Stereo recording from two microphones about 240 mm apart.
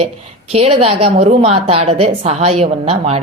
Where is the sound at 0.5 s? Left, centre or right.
Right.